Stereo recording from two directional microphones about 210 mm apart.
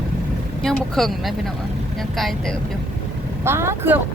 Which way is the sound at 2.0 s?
Centre (ahead or behind).